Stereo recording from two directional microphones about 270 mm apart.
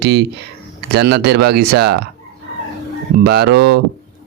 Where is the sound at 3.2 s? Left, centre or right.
Right.